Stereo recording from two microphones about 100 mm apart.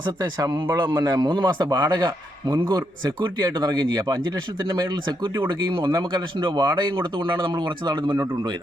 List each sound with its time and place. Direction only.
0.0 s a man's voice: 40° right (ahead or behind)